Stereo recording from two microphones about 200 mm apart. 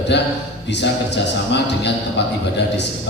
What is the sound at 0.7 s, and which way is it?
A man's voice, 60° left (ahead or behind).